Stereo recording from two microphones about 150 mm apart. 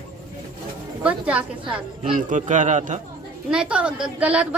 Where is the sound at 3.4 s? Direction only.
5° right (ahead or behind).